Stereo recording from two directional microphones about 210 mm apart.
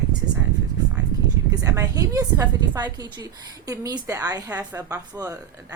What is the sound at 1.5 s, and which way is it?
Speech, 15° right (ahead or behind).